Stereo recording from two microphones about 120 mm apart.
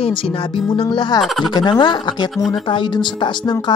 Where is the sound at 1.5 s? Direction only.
40° left (ahead or behind).